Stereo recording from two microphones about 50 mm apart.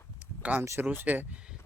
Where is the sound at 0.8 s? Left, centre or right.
Right.